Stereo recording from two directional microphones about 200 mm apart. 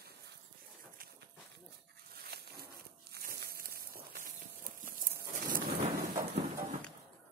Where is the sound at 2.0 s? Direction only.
50° right (ahead or behind).